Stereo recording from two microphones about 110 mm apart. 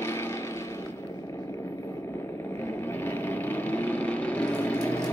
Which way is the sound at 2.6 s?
20° left (ahead or behind).